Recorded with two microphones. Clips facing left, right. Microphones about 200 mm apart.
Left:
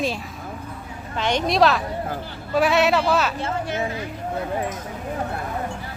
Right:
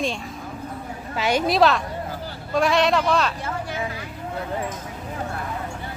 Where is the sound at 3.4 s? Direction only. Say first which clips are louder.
Left 3 dB; 25° left (ahead or behind).